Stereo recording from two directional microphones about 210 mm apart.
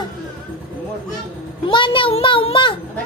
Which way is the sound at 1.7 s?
25° left (ahead or behind).